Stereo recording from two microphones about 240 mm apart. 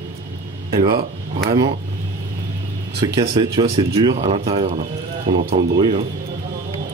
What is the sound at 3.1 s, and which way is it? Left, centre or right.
Speech, right.